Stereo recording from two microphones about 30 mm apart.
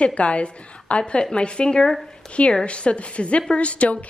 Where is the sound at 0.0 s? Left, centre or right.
Left.